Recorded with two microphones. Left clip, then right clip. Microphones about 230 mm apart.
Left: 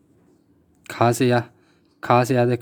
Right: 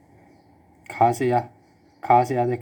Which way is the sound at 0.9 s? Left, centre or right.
Left.